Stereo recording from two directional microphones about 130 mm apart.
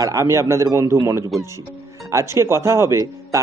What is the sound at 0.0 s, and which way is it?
Speech, 25° right (ahead or behind).